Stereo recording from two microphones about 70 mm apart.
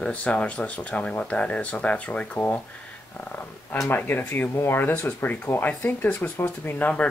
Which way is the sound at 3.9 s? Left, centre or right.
Left.